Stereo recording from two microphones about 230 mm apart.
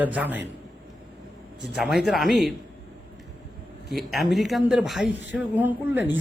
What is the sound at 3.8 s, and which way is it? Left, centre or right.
A man's voice, centre.